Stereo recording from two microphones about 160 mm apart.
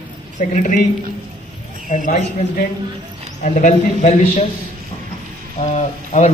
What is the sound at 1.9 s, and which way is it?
A man's voice, 50° left (ahead or behind).